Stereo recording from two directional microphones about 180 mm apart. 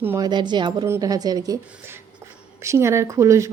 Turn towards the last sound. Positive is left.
turn(degrees=-15)  # may be behind; listen again after turning